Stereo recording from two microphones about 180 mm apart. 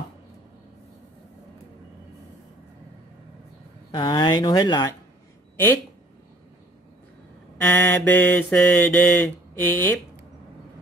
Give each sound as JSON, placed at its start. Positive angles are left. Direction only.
{"t": 3.9, "sound": "speech", "side_deg": 25}
{"t": 7.6, "sound": "mantra", "side_deg": 10}